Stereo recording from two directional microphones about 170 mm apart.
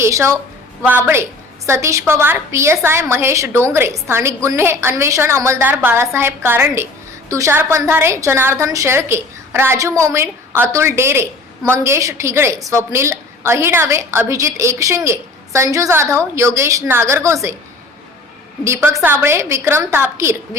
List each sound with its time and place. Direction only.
0.0 s a woman's voice: 15° right (ahead or behind)
18.6 s a woman's voice: 15° right (ahead or behind)